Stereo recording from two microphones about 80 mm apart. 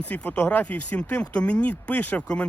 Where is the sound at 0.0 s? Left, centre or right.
Centre.